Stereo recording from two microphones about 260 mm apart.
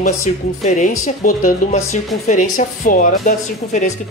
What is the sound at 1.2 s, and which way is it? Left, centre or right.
Speech, left.